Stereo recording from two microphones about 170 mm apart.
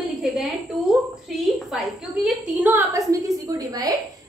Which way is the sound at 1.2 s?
Centre (ahead or behind).